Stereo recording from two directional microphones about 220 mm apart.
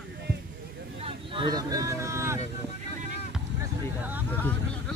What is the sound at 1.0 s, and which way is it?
Vehicle, 20° right (ahead or behind).